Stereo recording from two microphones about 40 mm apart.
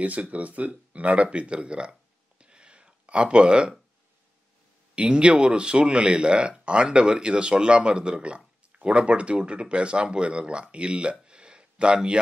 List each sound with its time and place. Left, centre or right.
0.0 s speech: right
2.4 s a sound: right
4.9 s speech: right